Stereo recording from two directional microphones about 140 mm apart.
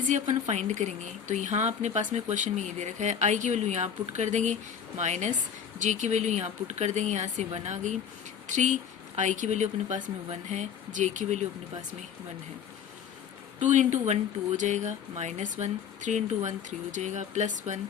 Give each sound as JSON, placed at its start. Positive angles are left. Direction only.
{"t": 0.1, "sound": "speech", "side_deg": -55}
{"t": 13.6, "sound": "speech", "side_deg": -60}